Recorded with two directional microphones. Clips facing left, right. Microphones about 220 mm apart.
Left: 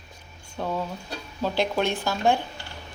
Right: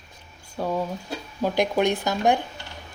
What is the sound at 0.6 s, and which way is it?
Speech, 10° right (ahead or behind).